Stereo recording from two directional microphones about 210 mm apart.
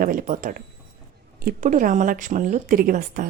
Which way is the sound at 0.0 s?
40° right (ahead or behind).